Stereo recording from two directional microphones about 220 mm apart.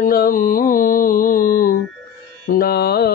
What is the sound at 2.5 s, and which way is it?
Music, 45° left (ahead or behind).